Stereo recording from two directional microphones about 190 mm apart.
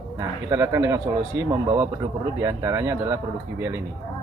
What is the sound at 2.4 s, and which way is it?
Speech, 15° right (ahead or behind).